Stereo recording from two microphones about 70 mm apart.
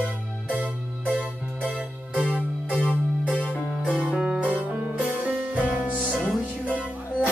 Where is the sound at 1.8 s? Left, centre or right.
Centre.